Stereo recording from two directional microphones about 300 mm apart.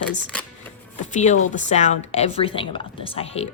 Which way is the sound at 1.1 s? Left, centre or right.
Left.